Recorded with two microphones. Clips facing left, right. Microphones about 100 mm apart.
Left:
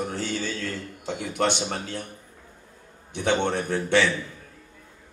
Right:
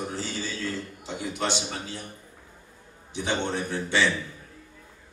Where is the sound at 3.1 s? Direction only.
55° left (ahead or behind).